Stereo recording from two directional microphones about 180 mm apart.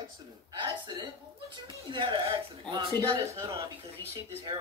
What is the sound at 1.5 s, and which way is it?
Speech, 25° right (ahead or behind).